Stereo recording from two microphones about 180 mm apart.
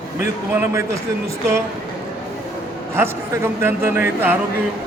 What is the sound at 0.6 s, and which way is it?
Speech, 15° right (ahead or behind).